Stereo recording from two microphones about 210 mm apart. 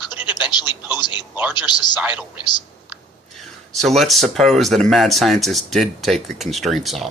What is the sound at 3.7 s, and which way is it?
Speech, centre (ahead or behind).